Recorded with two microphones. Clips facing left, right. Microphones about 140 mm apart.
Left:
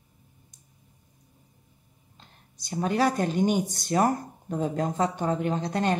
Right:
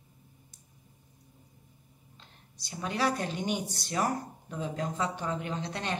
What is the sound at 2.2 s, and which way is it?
Speech, 45° left (ahead or behind).